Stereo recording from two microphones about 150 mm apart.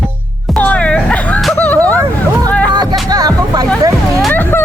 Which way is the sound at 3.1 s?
25° right (ahead or behind).